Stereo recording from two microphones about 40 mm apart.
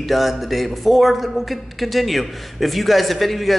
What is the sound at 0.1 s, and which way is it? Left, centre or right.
A man's voice, centre.